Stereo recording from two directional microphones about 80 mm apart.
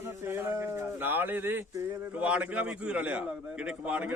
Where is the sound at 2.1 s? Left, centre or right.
Centre.